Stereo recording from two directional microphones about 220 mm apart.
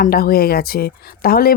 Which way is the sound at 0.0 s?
45° left (ahead or behind).